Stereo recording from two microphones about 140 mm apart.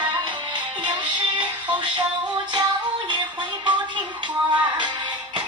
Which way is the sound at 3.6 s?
35° right (ahead or behind).